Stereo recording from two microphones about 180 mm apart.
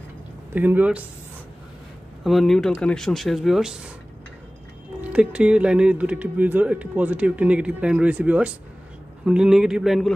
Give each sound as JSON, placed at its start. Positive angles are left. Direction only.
{"t": 0.6, "sound": "speech", "side_deg": -10}
{"t": 2.2, "sound": "speech", "side_deg": 0}
{"t": 5.0, "sound": "speech", "side_deg": -5}